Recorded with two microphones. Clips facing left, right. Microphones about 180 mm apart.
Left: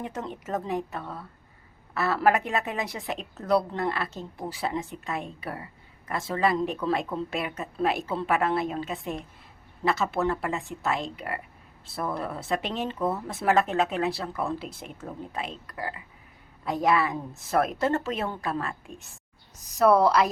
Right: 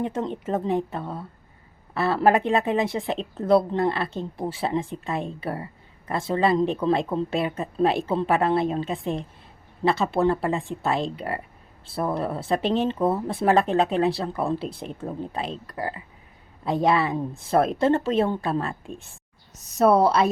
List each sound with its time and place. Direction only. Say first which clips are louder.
0.0 s speech: right 7 dB; 25° right (ahead or behind)